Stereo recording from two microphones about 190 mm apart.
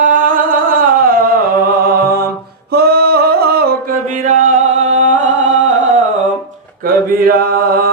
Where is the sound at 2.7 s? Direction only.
55° right (ahead or behind); by 5.7 s 40° right (ahead or behind).